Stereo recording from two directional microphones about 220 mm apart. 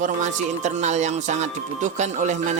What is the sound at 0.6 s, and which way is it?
Speech, 30° right (ahead or behind).